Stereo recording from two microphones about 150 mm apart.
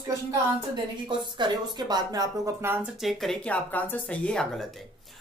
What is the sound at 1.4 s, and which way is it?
Speech, 30° right (ahead or behind).